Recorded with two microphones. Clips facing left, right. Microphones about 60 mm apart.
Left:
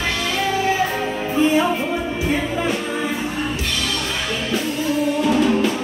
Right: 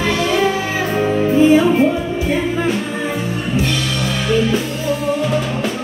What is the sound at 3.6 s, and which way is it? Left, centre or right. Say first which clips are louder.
Music: right 4 dB; centre.